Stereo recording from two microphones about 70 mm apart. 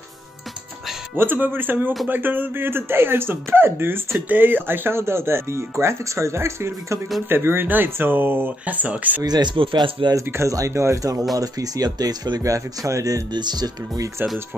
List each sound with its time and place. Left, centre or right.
1.1 s speech: right
9.2 s speech: right
10.2 s speech: right
10.5 s speech: right